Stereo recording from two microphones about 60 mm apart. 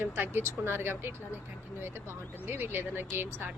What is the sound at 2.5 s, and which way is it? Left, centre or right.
Speech, right.